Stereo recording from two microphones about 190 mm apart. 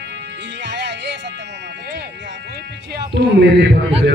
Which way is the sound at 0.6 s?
65° right (ahead or behind).